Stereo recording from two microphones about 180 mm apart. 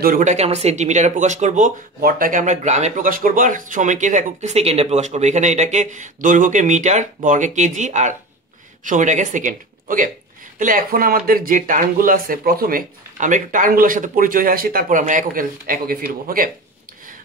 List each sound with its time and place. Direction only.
0.0 s speech: 45° right (ahead or behind)
2.0 s speech: 55° right (ahead or behind)